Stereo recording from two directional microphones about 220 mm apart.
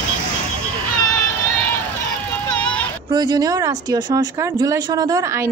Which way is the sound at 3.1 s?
20° right (ahead or behind).